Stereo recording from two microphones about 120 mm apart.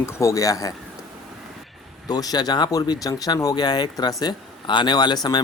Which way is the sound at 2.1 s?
35° left (ahead or behind).